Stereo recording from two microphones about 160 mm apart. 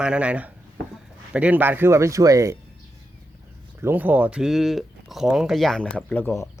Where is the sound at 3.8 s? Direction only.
10° right (ahead or behind).